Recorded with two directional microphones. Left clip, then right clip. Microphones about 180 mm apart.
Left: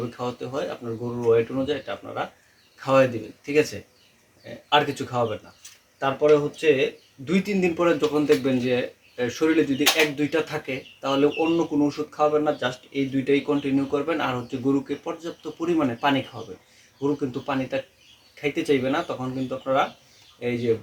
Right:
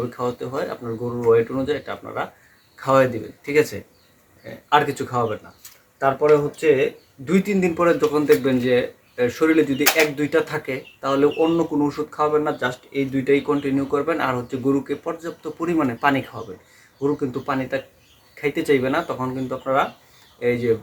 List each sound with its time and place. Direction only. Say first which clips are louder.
0.2 s speech: right 3 dB; centre (ahead or behind)